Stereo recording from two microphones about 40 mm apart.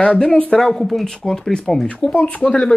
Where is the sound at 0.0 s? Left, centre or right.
Left.